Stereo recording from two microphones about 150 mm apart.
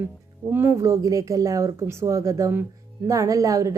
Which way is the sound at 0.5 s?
15° right (ahead or behind).